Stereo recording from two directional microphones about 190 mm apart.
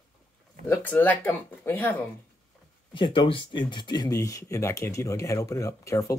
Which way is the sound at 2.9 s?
25° left (ahead or behind).